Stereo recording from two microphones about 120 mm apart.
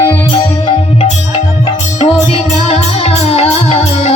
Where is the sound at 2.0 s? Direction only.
50° left (ahead or behind).